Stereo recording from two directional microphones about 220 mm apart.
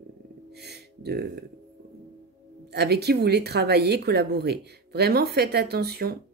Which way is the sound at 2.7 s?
50° right (ahead or behind).